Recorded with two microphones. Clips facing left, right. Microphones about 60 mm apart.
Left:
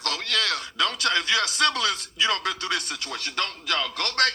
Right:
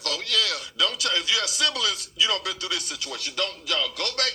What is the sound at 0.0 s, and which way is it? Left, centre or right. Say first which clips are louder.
A man's voice: even; left.